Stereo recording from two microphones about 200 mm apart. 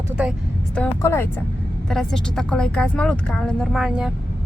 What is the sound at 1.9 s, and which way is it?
Speech, centre (ahead or behind).